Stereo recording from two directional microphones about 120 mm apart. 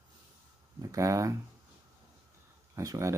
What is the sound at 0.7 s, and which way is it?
Speech, 25° right (ahead or behind).